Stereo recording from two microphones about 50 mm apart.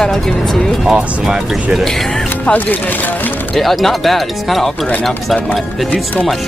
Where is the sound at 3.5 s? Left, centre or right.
Centre.